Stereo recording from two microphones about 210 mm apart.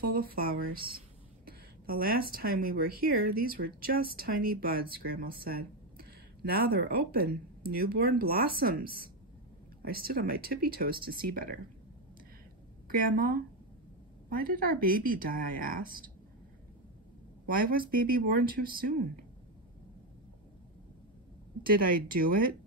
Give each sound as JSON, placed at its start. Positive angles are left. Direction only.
{"t": 0.0, "sound": "speech", "side_deg": -45}
{"t": 12.8, "sound": "speech", "side_deg": -40}
{"t": 17.6, "sound": "speech", "side_deg": -45}
{"t": 21.6, "sound": "speech", "side_deg": -45}